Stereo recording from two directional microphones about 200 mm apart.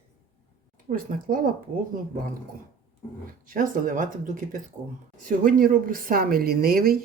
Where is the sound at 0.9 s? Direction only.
45° right (ahead or behind).